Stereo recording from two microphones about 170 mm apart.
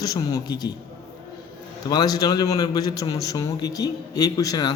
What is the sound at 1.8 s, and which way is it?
A man's voice, 25° left (ahead or behind).